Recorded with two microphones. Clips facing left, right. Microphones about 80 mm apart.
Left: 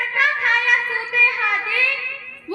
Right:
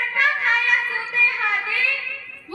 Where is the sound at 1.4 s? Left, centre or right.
Left.